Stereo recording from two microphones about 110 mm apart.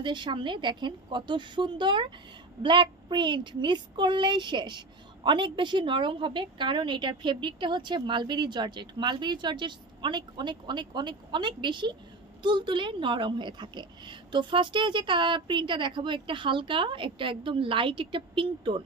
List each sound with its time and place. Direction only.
0.0 s a woman's voice: 45° right (ahead or behind)